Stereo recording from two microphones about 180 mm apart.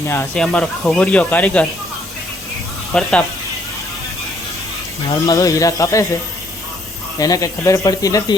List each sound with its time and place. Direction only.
0.1 s speech: 10° left (ahead or behind)
2.9 s speech: 5° left (ahead or behind)
5.2 s a man's voice: 20° left (ahead or behind)
7.2 s a man's voice: 20° left (ahead or behind)